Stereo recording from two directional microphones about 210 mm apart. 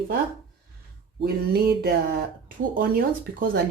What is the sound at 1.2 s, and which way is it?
Speech, 45° right (ahead or behind).